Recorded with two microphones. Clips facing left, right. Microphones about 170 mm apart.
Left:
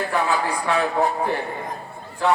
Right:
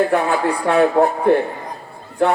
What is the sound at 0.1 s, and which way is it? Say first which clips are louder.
A man's voice: right 5 dB; 55° right (ahead or behind).